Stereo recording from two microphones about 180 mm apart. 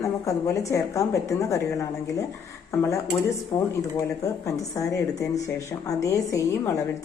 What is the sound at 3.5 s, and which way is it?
A woman's voice, 20° left (ahead or behind).